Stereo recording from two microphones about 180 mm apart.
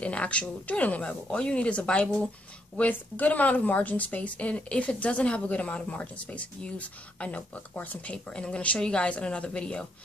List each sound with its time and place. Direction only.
0.0 s speech: 5° left (ahead or behind)